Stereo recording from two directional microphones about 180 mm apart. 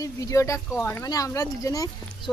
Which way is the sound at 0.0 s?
15° left (ahead or behind).